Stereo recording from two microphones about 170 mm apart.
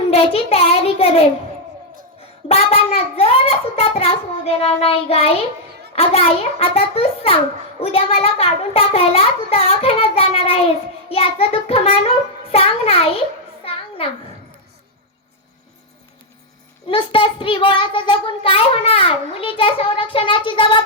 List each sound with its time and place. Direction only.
0.1 s a child's voice: 35° left (ahead or behind)
2.5 s a child's voice: 35° left (ahead or behind)
13.7 s a sound: 35° left (ahead or behind)
16.9 s a child's voice: 30° left (ahead or behind)